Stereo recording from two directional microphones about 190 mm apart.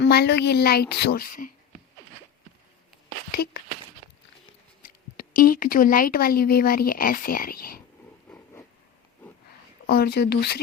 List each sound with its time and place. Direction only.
0.0 s a woman's voice: 60° left (ahead or behind)
3.3 s a woman's voice: 55° left (ahead or behind)
4.0 s a sound: 30° right (ahead or behind)
4.8 s speech: 45° left (ahead or behind)
8.3 s a sound: 5° left (ahead or behind)
9.8 s a woman's voice: 55° left (ahead or behind)